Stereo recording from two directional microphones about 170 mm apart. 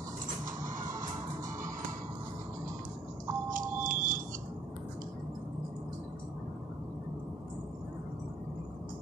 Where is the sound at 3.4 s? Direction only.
50° right (ahead or behind).